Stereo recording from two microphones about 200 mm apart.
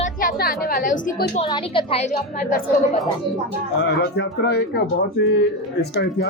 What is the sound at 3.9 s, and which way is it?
A woman's voice, 55° left (ahead or behind).